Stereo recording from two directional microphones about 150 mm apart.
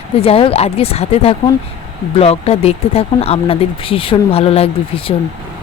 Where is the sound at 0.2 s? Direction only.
40° left (ahead or behind).